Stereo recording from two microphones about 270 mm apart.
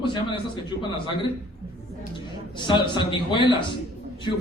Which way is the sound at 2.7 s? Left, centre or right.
Centre.